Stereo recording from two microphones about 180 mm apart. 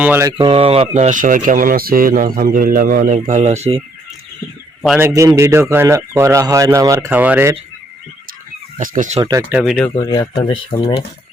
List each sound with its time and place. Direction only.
0.0 s speech: 15° right (ahead or behind)
0.3 s speech: 30° right (ahead or behind)
4.9 s speech: 15° right (ahead or behind)
8.8 s speech: 50° right (ahead or behind)
9.5 s speech: centre (ahead or behind)
9.9 s speech: 20° left (ahead or behind)